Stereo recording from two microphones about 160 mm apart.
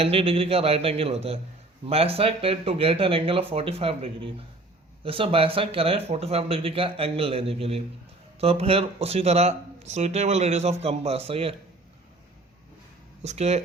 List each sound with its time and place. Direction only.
0.0 s speech: 35° right (ahead or behind)
13.2 s speech: 40° right (ahead or behind)